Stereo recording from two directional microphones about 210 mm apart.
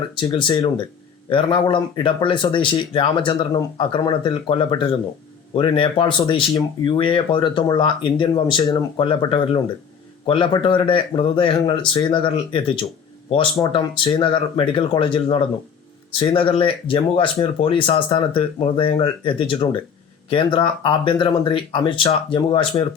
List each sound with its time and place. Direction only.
0.2 s speech: 20° left (ahead or behind)